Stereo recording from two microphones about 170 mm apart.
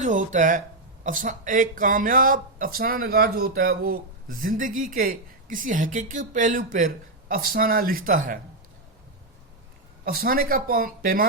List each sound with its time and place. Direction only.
0.0 s speech: 45° right (ahead or behind)
10.0 s speech: 60° right (ahead or behind)